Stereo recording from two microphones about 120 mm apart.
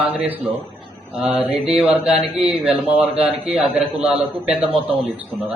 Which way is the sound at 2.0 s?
60° right (ahead or behind).